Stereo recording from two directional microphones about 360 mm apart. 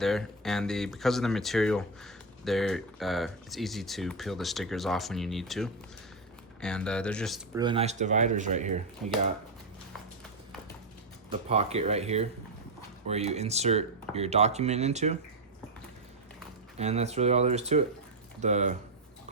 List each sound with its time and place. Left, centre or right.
0.0 s speech: centre
7.6 s speech: centre
11.3 s speech: centre
16.7 s speech: centre